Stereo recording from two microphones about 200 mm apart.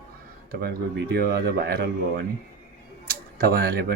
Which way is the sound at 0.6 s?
50° right (ahead or behind).